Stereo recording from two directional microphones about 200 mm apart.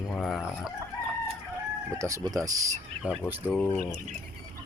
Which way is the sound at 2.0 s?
15° right (ahead or behind).